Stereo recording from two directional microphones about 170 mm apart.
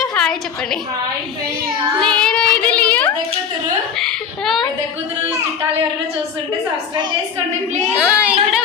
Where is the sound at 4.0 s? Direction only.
Centre (ahead or behind).